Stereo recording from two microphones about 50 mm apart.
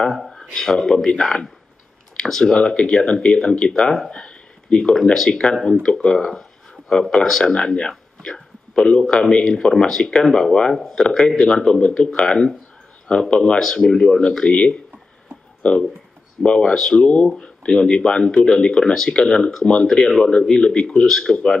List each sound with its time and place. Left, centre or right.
0.5 s speech: centre
4.1 s a sound: centre
4.9 s speech: centre
8.2 s a sound: centre
9.1 s speech: centre
17.0 s speech: left